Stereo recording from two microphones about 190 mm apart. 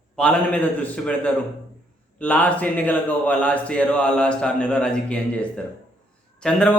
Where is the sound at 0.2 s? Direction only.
5° left (ahead or behind).